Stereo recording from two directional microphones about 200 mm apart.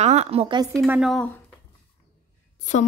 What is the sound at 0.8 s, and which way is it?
Speech, 5° right (ahead or behind).